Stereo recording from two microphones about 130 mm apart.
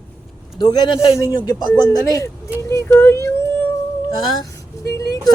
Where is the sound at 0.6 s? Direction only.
30° left (ahead or behind).